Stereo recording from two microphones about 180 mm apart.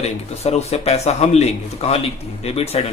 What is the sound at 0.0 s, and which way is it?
Speech, 35° left (ahead or behind).